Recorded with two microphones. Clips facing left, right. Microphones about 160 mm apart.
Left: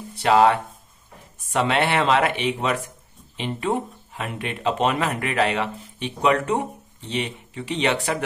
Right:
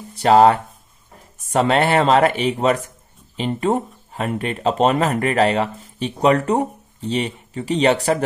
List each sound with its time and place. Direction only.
0.1 s speech: 40° right (ahead or behind)